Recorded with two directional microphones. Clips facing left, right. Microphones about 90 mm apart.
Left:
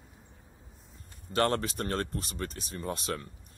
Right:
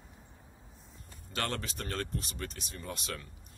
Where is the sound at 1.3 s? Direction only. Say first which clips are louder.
Left 9 dB; 40° left (ahead or behind).